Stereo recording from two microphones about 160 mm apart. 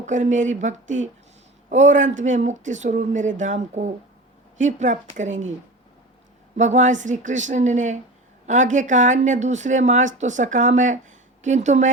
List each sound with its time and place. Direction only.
0.0 s speech: 50° right (ahead or behind)
6.6 s speech: 45° right (ahead or behind)